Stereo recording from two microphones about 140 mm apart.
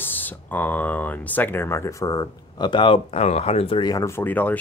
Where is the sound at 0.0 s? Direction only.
15° left (ahead or behind); by 3.8 s 45° left (ahead or behind).